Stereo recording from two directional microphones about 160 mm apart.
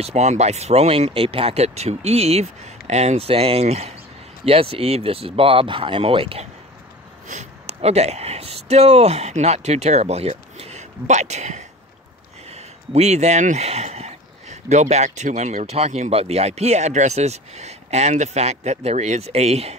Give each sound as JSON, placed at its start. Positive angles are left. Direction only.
{"t": 0.0, "sound": "speech", "side_deg": -45}